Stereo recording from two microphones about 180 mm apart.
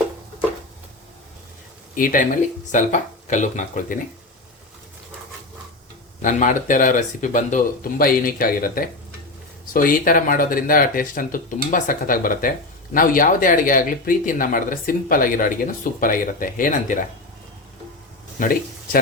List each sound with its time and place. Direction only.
2.0 s speech: 50° left (ahead or behind)
6.2 s speech: 45° left (ahead or behind)
18.3 s speech: 50° left (ahead or behind)